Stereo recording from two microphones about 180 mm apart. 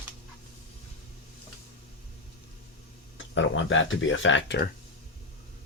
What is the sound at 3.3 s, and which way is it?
Speech, 90° left.